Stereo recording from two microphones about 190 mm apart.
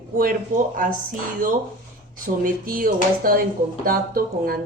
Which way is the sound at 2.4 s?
45° right (ahead or behind).